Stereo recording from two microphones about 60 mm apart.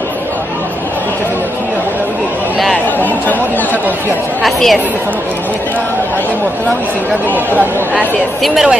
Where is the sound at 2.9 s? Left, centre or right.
Left.